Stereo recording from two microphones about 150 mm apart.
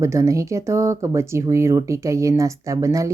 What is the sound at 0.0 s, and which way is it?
Speech, 20° right (ahead or behind).